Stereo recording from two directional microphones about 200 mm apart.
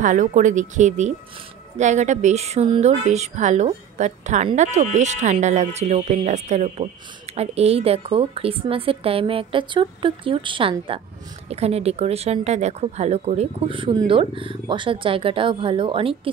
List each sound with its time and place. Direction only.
0.0 s speech: 40° right (ahead or behind)